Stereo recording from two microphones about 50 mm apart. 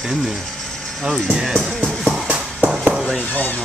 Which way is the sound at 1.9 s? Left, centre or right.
Centre.